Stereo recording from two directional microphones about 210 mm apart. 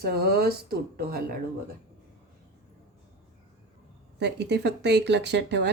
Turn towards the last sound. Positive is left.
turn(degrees=-55)  # may be behind; listen again after turning